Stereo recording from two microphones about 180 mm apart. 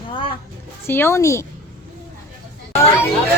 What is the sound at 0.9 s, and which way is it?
Speech, 15° left (ahead or behind).